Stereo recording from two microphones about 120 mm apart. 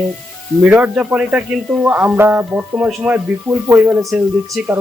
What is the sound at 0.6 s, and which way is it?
Speech, 15° right (ahead or behind).